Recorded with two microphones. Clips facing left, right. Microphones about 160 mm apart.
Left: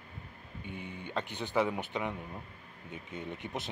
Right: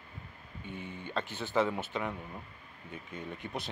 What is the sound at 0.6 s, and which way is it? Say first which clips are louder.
Speech: right 1 dB; 15° left (ahead or behind).